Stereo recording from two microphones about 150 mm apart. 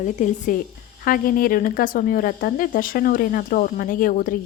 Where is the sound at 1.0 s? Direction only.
70° left (ahead or behind).